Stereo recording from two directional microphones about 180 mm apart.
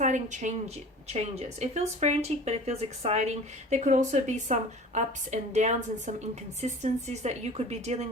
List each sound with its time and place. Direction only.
0.0 s speech: 45° right (ahead or behind)